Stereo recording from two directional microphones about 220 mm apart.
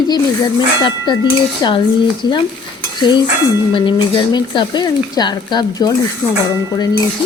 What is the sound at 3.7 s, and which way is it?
A woman's voice, 20° left (ahead or behind).